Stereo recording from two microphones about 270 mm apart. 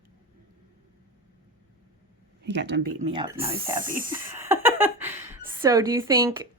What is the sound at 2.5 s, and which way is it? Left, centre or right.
Speech, right.